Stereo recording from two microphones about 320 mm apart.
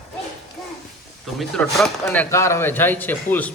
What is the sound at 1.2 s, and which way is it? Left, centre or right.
Speech, centre.